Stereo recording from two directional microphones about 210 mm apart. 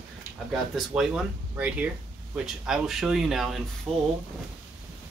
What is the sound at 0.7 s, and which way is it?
Speech, centre (ahead or behind).